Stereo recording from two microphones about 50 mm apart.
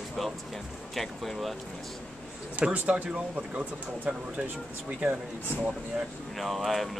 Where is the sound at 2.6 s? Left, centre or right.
Right.